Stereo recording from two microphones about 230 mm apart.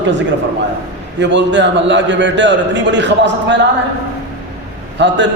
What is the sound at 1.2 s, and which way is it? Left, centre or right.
A man's voice, right.